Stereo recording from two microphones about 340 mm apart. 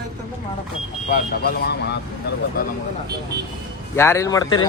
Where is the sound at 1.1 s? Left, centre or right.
Left.